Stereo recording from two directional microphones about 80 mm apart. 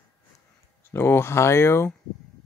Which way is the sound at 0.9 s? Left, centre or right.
Left.